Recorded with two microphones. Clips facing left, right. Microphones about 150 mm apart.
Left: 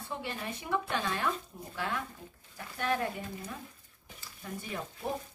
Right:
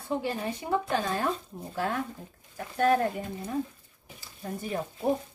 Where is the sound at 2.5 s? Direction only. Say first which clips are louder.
Right 9 dB; 45° right (ahead or behind).